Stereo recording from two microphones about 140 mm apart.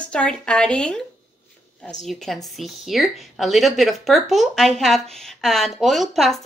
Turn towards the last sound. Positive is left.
turn(degrees=0)  # may be behind; listen again after turning